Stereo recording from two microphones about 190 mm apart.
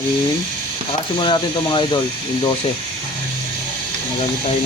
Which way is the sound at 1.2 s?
25° left (ahead or behind).